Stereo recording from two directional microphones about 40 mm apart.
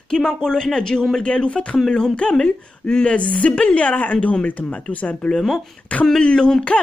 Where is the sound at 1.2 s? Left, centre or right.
Left.